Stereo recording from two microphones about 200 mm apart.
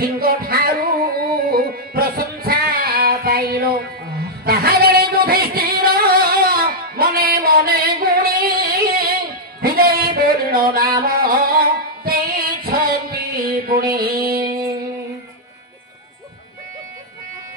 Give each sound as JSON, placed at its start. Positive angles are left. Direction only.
{"t": 0.0, "sound": "music", "side_deg": -50}
{"t": 4.5, "sound": "singing", "side_deg": -50}
{"t": 9.6, "sound": "a sound", "side_deg": -50}